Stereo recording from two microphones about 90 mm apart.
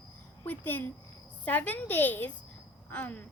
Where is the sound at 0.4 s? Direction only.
20° left (ahead or behind).